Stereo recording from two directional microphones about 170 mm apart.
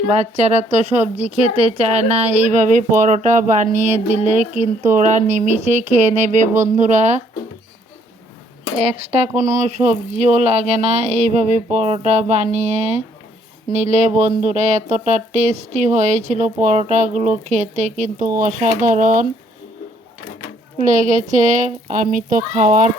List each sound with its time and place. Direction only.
0.1 s speech: 40° right (ahead or behind)
8.8 s speech: 35° right (ahead or behind); by 19.3 s 50° right (ahead or behind)
20.7 s speech: 45° right (ahead or behind)